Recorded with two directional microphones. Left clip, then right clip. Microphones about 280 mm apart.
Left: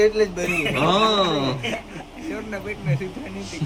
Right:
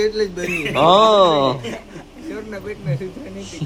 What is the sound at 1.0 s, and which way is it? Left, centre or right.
Speech, centre.